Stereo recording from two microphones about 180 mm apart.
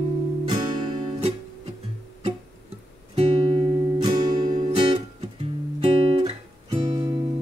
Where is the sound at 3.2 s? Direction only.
30° right (ahead or behind).